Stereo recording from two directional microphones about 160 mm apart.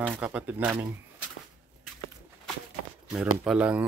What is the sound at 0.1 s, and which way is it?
Speech, 10° right (ahead or behind).